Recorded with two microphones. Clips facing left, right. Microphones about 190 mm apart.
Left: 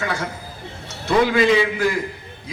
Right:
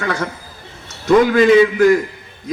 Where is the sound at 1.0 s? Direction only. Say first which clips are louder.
Right 5 dB; 45° right (ahead or behind).